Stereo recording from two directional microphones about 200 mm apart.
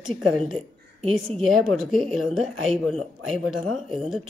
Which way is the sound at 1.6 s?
Centre (ahead or behind).